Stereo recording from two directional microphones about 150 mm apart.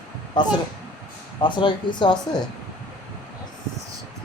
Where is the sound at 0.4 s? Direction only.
30° left (ahead or behind).